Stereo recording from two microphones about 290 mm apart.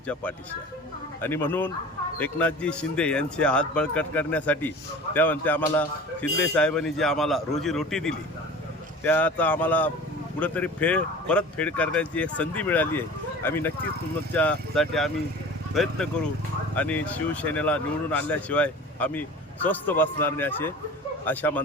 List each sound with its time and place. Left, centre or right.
0.1 s speech: centre